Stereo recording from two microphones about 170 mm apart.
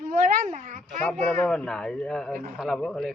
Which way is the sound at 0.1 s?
55° right (ahead or behind).